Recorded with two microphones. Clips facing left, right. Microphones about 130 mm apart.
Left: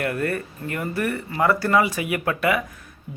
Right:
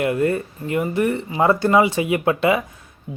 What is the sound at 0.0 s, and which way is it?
Speech, 20° right (ahead or behind).